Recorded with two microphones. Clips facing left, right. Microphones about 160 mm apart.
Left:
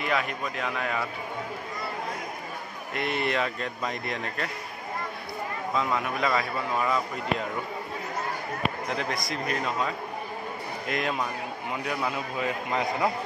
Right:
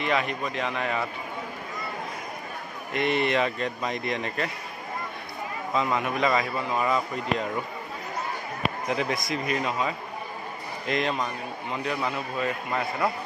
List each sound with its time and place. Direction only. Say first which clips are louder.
0.0 s a man's voice: right 2 dB; 5° left (ahead or behind)
2.9 s a man's voice: right 4 dB; centre (ahead or behind)
5.8 s a man's voice: right 3 dB; 5° right (ahead or behind)
9.3 s a man's voice: right 2 dB; 5° right (ahead or behind); by 13.1 s 15° left (ahead or behind)